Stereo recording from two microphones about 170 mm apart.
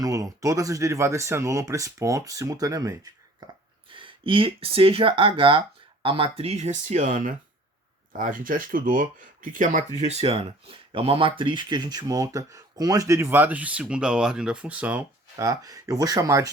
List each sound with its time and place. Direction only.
0.0 s speech: 20° right (ahead or behind); by 9.8 s 50° right (ahead or behind)
10.1 s speech: 35° right (ahead or behind); by 15.4 s 10° right (ahead or behind)
15.4 s speech: 20° right (ahead or behind)